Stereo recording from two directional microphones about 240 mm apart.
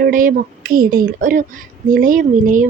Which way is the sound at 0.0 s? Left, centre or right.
Right.